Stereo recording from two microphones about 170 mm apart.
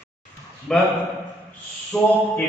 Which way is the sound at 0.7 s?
5° left (ahead or behind).